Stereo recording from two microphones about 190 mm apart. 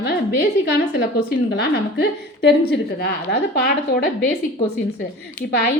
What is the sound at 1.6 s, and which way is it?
A woman's voice, 60° left (ahead or behind).